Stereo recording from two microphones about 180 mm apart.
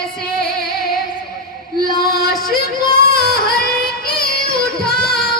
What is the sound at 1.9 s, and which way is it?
Female singing, 25° left (ahead or behind).